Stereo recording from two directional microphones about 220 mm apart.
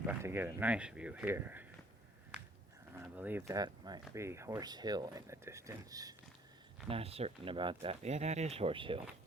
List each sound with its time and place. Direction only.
0.0 s speech: 10° right (ahead or behind)
2.9 s speech: 10° right (ahead or behind)
6.8 s speech: 25° right (ahead or behind)